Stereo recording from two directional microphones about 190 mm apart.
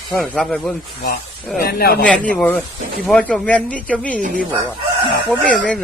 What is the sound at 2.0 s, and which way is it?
Speech, 5° left (ahead or behind).